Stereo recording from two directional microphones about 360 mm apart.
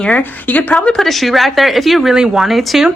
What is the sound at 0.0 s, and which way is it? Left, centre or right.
A woman's voice, centre.